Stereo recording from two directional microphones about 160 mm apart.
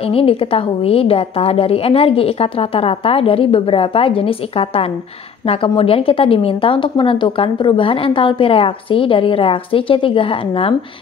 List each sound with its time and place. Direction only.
0.1 s a woman's voice: 35° left (ahead or behind)